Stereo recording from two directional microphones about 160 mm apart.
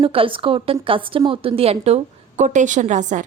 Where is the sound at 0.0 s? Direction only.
35° right (ahead or behind).